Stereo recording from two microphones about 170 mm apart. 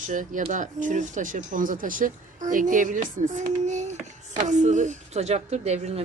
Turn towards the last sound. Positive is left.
turn(degrees=-40)  # may be behind; listen again after turning